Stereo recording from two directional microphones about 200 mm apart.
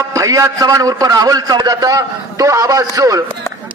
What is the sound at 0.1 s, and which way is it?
A man's voice, 15° right (ahead or behind).